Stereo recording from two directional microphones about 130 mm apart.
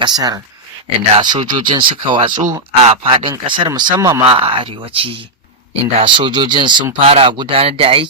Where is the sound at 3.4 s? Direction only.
35° right (ahead or behind).